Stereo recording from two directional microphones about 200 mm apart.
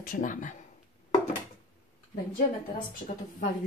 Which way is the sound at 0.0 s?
40° left (ahead or behind).